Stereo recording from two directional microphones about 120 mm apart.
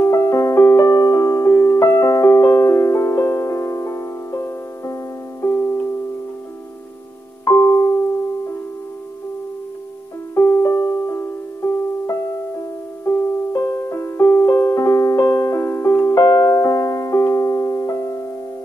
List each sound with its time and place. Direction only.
0.0 s piano: 25° left (ahead or behind)
5.4 s music: 20° left (ahead or behind)
7.4 s music: 20° left (ahead or behind)
10.3 s music: 25° left (ahead or behind)